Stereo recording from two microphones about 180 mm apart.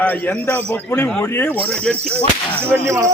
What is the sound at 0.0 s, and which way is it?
A man's voice, 10° left (ahead or behind).